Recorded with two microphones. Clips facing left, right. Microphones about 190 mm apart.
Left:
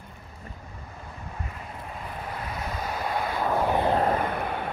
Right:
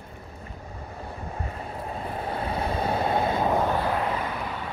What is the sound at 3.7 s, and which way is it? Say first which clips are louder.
Vehicle: left 2 dB; 20° left (ahead or behind).